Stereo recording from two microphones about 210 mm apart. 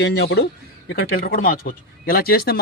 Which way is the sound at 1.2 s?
40° left (ahead or behind).